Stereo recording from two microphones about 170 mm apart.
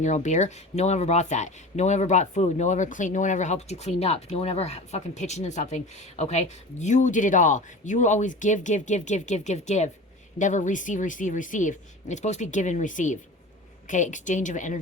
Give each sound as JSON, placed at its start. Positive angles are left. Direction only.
{"t": 0.0, "sound": "speech", "side_deg": 45}